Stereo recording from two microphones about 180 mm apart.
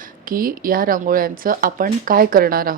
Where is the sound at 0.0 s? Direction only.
50° right (ahead or behind).